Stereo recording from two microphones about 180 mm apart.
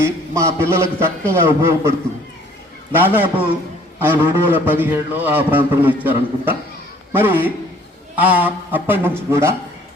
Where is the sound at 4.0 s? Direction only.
15° right (ahead or behind).